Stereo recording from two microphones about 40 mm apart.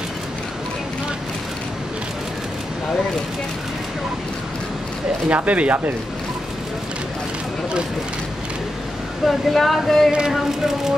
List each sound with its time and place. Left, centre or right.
5.3 s speech: right
9.2 s speech: centre